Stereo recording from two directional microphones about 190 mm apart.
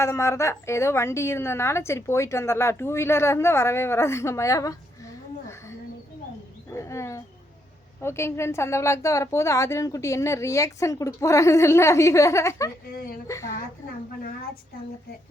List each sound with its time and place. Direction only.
0.0 s a woman's voice: 15° left (ahead or behind)
6.7 s wild animals: 15° left (ahead or behind)
8.0 s a woman's voice: 15° left (ahead or behind)